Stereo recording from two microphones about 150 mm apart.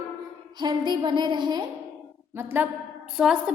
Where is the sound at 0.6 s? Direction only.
30° right (ahead or behind).